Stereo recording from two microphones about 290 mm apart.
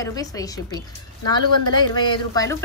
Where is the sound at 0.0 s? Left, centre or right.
Centre.